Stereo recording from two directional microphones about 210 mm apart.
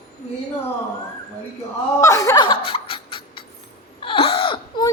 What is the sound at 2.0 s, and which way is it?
Laughter, 15° left (ahead or behind).